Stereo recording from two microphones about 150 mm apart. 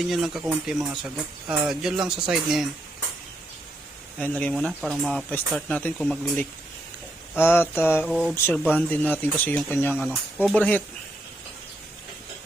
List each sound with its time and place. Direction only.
0.0 s speech: centre (ahead or behind)
4.2 s speech: 10° left (ahead or behind)
8.0 s speech: 5° right (ahead or behind)
8.4 s speech: 10° left (ahead or behind)